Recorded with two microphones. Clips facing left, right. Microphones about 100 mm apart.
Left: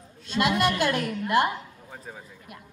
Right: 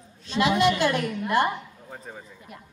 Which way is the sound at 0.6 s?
50° left (ahead or behind).